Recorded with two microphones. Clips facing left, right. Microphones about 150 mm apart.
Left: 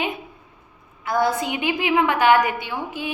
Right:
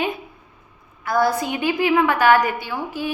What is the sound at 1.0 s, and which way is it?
A woman's voice, 20° left (ahead or behind).